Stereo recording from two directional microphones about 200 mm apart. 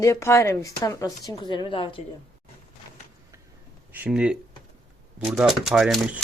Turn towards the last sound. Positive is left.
turn(degrees=0)  # may be behind; listen again after turning